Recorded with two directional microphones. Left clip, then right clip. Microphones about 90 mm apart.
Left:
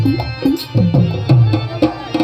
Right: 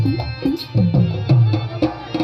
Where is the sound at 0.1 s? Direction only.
15° left (ahead or behind).